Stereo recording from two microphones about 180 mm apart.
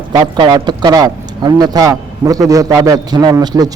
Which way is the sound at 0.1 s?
25° right (ahead or behind).